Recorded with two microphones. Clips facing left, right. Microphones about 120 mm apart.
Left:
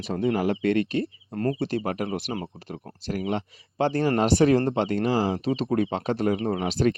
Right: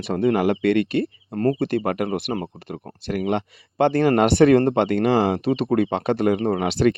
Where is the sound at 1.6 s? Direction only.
55° right (ahead or behind).